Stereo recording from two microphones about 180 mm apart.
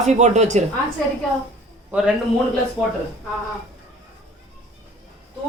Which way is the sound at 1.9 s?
5° right (ahead or behind).